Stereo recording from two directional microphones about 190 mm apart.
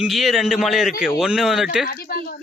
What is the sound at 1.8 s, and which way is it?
Speech, 55° left (ahead or behind).